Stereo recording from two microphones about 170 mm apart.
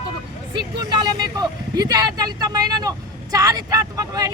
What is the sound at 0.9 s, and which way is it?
Speech, 25° right (ahead or behind).